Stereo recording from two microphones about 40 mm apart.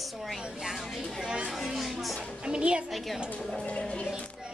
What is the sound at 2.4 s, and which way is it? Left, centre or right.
Speech, right.